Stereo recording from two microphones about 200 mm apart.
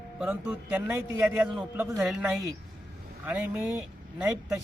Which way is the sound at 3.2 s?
5° right (ahead or behind).